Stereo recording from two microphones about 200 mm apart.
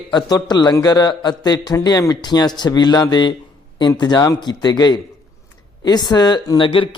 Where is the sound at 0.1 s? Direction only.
20° left (ahead or behind).